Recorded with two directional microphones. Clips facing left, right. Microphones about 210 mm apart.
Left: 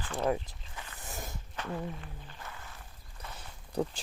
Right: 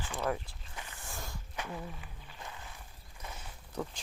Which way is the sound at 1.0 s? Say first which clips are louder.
Left 4 dB; 20° left (ahead or behind).